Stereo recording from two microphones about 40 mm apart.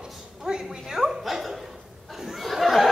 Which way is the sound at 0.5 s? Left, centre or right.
Centre.